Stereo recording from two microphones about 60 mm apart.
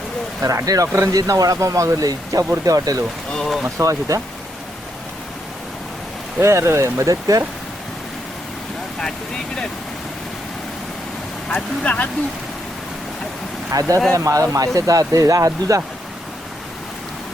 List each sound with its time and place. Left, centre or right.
0.4 s speech: right
3.3 s speech: centre
3.8 s speech: right
6.4 s speech: right
7.1 s speech: right
11.4 s speech: centre
13.7 s speech: right